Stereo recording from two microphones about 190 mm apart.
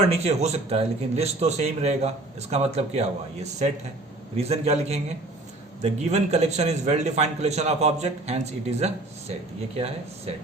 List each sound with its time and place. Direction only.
0.1 s a man's voice: 35° right (ahead or behind)